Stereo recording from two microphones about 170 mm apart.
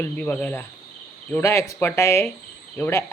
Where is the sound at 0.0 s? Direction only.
10° left (ahead or behind).